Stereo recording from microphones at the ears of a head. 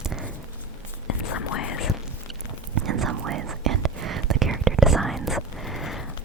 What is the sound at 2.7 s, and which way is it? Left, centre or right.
Whispering, right.